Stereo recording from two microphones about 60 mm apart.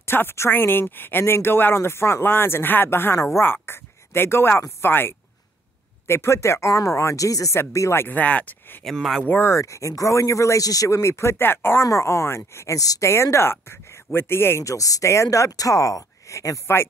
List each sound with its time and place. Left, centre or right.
0.0 s speech: left
7.5 s speech: left
8.1 s speech: left
8.8 s speech: centre
9.4 s speech: left
11.8 s speech: left
13.0 s speech: left
14.6 s speech: left